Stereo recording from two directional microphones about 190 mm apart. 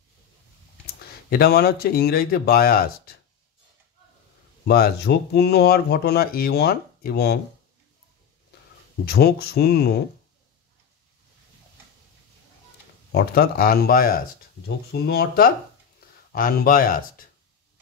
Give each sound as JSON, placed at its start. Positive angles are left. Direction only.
{"t": 1.3, "sound": "speech", "side_deg": 55}
{"t": 4.6, "sound": "speech", "side_deg": 55}
{"t": 9.0, "sound": "speech", "side_deg": 55}
{"t": 13.1, "sound": "speech", "side_deg": 55}